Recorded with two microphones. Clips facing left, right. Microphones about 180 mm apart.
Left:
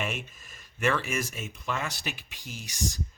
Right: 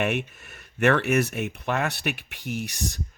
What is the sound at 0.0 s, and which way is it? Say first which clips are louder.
Speech: right 8 dB; 65° right (ahead or behind).